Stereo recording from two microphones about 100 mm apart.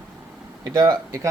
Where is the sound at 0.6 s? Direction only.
45° right (ahead or behind).